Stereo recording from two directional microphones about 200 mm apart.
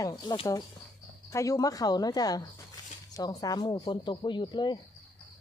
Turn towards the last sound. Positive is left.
turn(degrees=20)  # may be behind; listen again after turning